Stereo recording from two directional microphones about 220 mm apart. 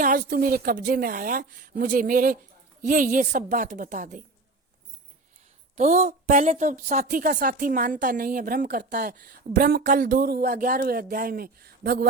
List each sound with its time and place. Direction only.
0.0 s a woman's voice: 40° right (ahead or behind)
5.7 s a woman's voice: 30° right (ahead or behind)